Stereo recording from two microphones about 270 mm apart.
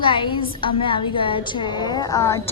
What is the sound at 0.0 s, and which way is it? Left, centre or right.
A woman's voice, centre.